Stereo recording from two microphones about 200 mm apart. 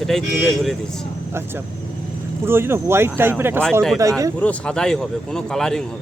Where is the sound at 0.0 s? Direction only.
Centre (ahead or behind).